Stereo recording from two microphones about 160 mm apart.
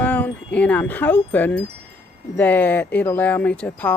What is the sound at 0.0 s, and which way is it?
Chime, 10° left (ahead or behind).